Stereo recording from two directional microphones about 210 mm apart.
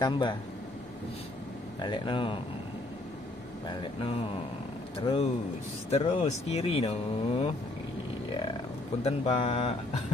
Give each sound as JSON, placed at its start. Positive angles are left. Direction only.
{"t": 0.0, "sound": "speech", "side_deg": 20}
{"t": 1.8, "sound": "speech", "side_deg": 20}
{"t": 4.9, "sound": "speech", "side_deg": 25}
{"t": 9.0, "sound": "speech", "side_deg": 30}